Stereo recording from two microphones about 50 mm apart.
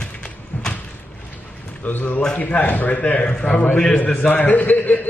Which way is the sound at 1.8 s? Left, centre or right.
Left.